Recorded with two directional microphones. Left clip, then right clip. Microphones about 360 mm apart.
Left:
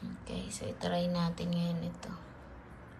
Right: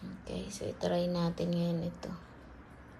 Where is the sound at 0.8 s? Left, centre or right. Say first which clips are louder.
Right 2 dB; centre.